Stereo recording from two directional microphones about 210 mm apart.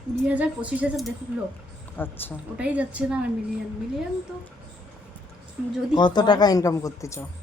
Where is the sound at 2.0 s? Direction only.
10° left (ahead or behind).